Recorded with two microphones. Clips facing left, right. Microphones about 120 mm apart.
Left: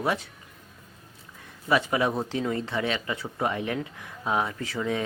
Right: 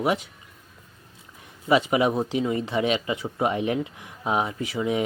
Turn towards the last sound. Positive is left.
turn(degrees=-15)  # may be behind; listen again after turning